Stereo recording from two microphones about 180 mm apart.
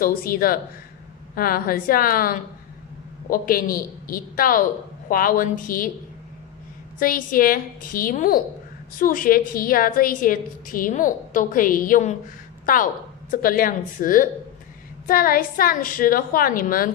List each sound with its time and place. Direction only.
0.0 s a woman's voice: 55° left (ahead or behind)
7.0 s a woman's voice: 50° left (ahead or behind)